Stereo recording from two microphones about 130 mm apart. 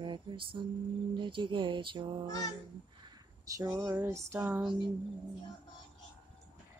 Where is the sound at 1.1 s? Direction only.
40° right (ahead or behind).